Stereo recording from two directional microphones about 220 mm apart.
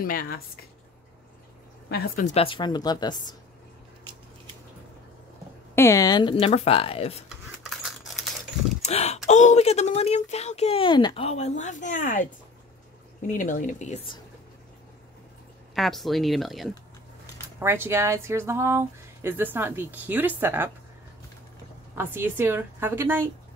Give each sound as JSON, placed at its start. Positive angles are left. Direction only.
{"t": 0.0, "sound": "speech", "side_deg": 40}
{"t": 1.9, "sound": "speech", "side_deg": 40}
{"t": 5.8, "sound": "speech", "side_deg": 15}
{"t": 7.2, "sound": "scissors", "side_deg": 0}
{"t": 8.8, "sound": "speech", "side_deg": 30}
{"t": 13.3, "sound": "speech", "side_deg": 35}
{"t": 15.7, "sound": "speech", "side_deg": 0}
{"t": 17.6, "sound": "speech", "side_deg": -10}
{"t": 21.9, "sound": "speech", "side_deg": -10}